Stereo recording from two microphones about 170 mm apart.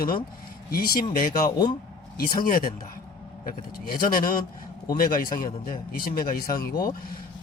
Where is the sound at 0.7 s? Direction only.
60° left (ahead or behind).